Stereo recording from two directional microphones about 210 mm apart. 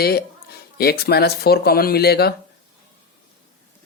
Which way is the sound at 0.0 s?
50° left (ahead or behind).